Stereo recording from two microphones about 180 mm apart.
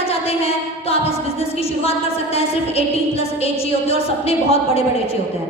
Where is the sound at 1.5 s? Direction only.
35° left (ahead or behind).